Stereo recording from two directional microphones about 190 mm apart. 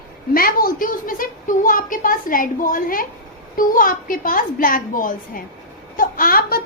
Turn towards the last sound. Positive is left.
turn(degrees=50)  # may be behind; listen again after turning